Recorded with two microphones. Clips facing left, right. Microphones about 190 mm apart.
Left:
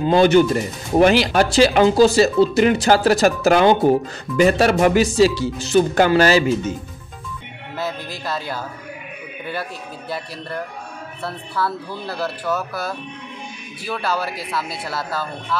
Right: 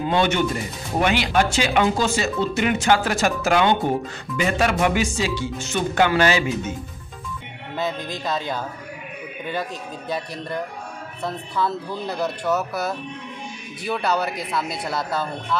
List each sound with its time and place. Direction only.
0.0 s speech: 35° left (ahead or behind)
7.8 s a man's voice: 20° right (ahead or behind)
14.4 s speech: 20° right (ahead or behind)
14.7 s speech: 5° left (ahead or behind)